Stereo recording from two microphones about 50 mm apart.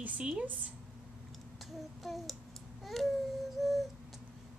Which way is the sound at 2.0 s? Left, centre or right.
Centre.